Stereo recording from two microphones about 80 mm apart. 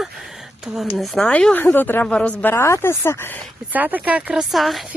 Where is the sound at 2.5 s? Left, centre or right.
Left.